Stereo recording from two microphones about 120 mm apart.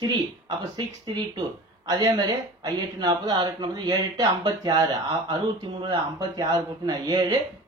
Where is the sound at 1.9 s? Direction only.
35° right (ahead or behind).